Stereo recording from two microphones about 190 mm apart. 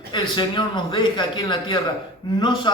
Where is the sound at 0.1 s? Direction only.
25° left (ahead or behind).